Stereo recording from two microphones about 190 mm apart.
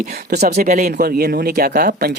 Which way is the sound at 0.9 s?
50° right (ahead or behind).